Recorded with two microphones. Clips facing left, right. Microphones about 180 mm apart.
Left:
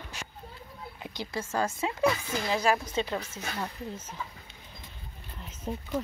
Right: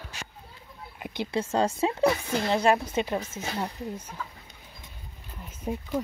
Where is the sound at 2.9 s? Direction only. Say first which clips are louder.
Right 3 dB; 15° right (ahead or behind).